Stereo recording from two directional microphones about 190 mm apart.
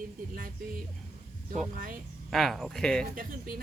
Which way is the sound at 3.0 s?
50° right (ahead or behind).